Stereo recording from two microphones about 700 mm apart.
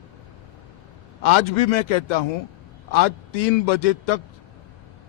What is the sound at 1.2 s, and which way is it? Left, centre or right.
A man's voice, left.